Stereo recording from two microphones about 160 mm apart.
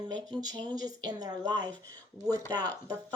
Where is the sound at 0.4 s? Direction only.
25° right (ahead or behind).